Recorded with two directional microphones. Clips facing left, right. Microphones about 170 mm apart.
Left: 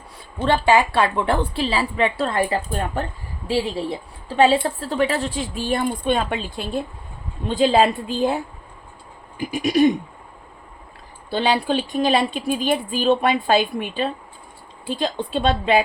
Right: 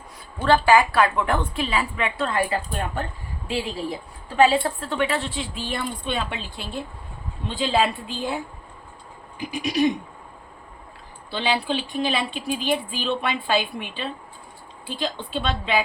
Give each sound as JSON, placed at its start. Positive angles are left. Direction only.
{"t": 0.4, "sound": "a woman's voice", "side_deg": 25}
{"t": 9.5, "sound": "a woman's voice", "side_deg": 50}
{"t": 11.3, "sound": "a woman's voice", "side_deg": 45}